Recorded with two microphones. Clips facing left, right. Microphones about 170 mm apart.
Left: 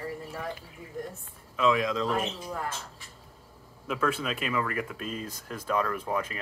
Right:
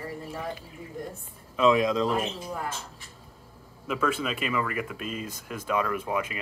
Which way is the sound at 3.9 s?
Centre (ahead or behind).